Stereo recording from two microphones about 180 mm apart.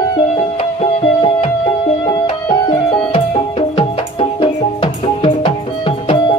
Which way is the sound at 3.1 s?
35° left (ahead or behind).